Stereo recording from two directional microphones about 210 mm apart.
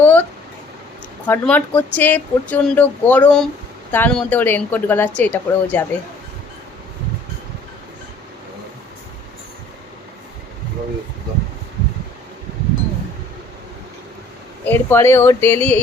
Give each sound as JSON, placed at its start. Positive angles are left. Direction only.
{"t": 0.0, "sound": "a sound", "side_deg": 10}
{"t": 1.3, "sound": "speech", "side_deg": 10}
{"t": 14.6, "sound": "speech", "side_deg": 10}